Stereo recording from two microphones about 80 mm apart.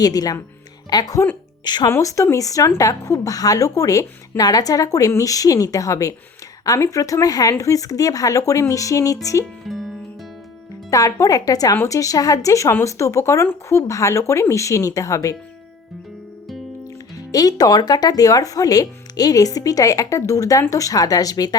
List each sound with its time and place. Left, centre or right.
0.0 s speech: left
1.6 s speech: left
1.9 s speech: left
9.4 s music: centre
10.9 s speech: left
17.2 s speech: left